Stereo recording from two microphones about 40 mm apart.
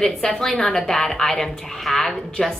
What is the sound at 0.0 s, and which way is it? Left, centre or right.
Speech, left.